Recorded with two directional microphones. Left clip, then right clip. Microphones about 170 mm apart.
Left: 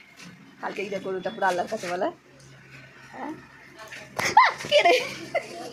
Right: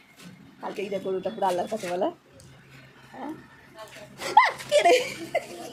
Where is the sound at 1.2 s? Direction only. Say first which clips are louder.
Left 3 dB; 20° right (ahead or behind).